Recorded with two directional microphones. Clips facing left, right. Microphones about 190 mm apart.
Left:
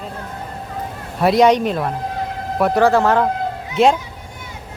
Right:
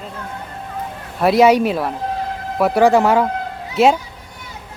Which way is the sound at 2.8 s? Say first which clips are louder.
Right 2 dB; 15° right (ahead or behind).